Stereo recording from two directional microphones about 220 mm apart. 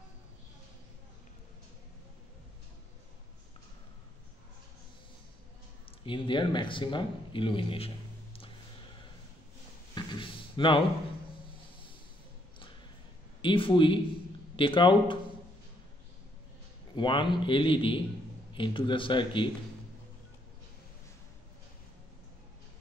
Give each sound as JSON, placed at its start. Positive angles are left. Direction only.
{"t": 6.0, "sound": "speech", "side_deg": 20}
{"t": 9.9, "sound": "a sound", "side_deg": 20}
{"t": 13.4, "sound": "a man's voice", "side_deg": 25}
{"t": 16.9, "sound": "a man's voice", "side_deg": 20}